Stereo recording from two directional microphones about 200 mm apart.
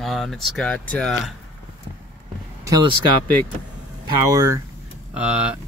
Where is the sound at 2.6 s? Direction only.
20° right (ahead or behind).